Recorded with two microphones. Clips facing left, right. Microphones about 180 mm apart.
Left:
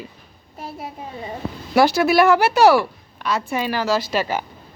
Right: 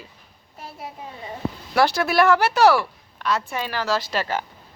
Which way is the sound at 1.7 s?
5° left (ahead or behind).